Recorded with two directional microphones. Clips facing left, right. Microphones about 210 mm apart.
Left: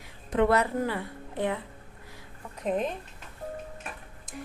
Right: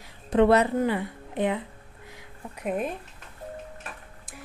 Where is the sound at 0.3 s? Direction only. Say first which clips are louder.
Right 4 dB; 25° right (ahead or behind).